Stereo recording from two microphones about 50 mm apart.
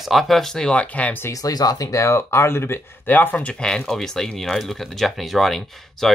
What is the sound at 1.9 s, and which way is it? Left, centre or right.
Speech, left.